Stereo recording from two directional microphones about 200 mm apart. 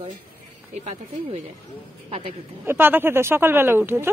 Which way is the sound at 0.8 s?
35° right (ahead or behind).